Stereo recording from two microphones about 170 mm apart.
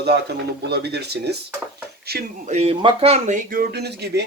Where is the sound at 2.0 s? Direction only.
65° right (ahead or behind).